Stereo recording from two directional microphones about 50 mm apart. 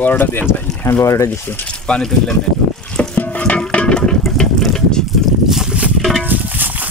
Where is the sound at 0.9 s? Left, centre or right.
Left.